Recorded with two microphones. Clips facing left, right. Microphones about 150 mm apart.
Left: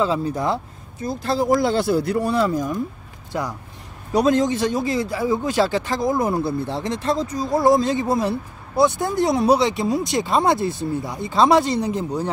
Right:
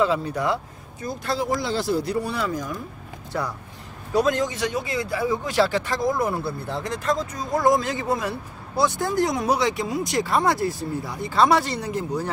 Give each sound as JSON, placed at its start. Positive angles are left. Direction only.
{"t": 0.0, "sound": "speech", "side_deg": 25}
{"t": 1.5, "sound": "speech", "side_deg": 50}
{"t": 2.3, "sound": "speech", "side_deg": 35}
{"t": 3.3, "sound": "speech", "side_deg": 20}
{"t": 5.1, "sound": "speech", "side_deg": 20}